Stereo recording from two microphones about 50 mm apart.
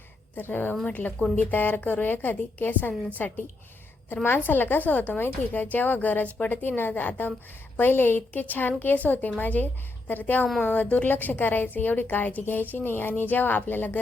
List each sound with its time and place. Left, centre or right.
0.3 s a woman's voice: left
4.1 s a woman's voice: left